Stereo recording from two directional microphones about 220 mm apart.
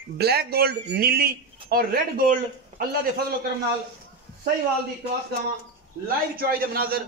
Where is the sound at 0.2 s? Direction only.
45° right (ahead or behind).